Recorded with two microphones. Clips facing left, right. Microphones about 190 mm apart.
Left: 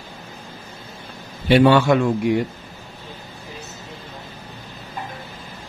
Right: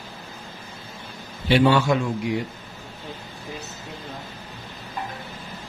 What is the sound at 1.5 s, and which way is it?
Speech, 60° left (ahead or behind).